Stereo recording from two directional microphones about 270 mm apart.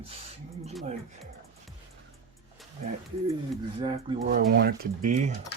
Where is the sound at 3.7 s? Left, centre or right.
Centre.